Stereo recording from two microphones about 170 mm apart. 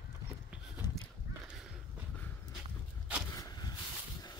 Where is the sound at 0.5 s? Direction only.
5° right (ahead or behind).